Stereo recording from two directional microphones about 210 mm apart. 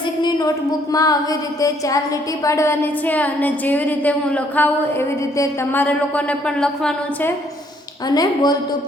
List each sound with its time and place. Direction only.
0.2 s a sound: 20° left (ahead or behind)
0.9 s a woman's voice: 15° left (ahead or behind)
8.0 s a woman's voice: 20° left (ahead or behind)